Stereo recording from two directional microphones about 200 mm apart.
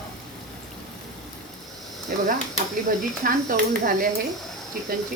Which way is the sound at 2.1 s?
50° right (ahead or behind).